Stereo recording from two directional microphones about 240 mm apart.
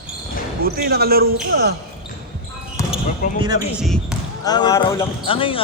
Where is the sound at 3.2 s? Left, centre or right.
Left.